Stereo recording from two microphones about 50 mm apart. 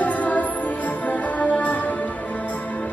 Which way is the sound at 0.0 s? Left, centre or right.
Left.